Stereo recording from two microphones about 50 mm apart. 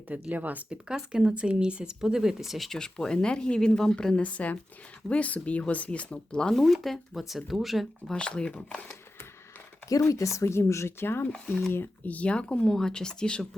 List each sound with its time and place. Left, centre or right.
0.1 s speech: right
0.7 s speech: centre
2.6 s speech: centre
4.2 s speech: left
6.5 s speech: centre
8.1 s speech: centre
10.0 s speech: left
11.0 s speech: left
12.0 s speech: left